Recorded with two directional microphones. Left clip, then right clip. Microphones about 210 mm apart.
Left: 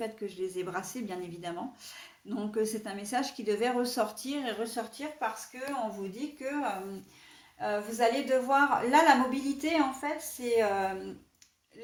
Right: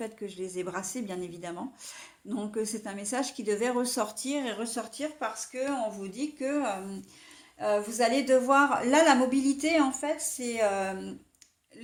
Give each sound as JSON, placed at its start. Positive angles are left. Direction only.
{"t": 0.0, "sound": "speech", "side_deg": -30}
{"t": 6.1, "sound": "a woman's voice", "side_deg": -50}